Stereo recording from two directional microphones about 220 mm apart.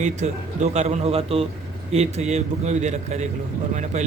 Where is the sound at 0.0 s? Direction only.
30° right (ahead or behind).